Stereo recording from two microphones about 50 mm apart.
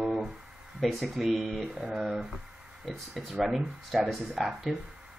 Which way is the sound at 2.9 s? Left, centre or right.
Centre.